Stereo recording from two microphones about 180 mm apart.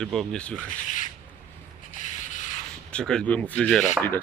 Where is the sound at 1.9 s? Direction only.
45° left (ahead or behind).